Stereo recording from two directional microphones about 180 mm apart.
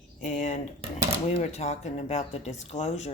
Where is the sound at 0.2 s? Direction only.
40° left (ahead or behind).